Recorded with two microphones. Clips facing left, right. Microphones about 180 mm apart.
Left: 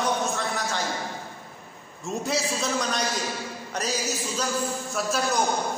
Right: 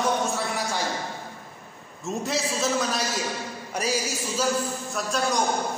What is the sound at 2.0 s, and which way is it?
A man's voice, centre (ahead or behind).